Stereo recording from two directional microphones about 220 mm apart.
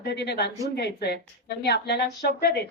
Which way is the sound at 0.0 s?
50° left (ahead or behind).